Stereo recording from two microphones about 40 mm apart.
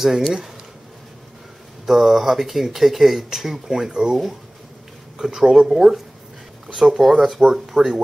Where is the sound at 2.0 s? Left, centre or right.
Centre.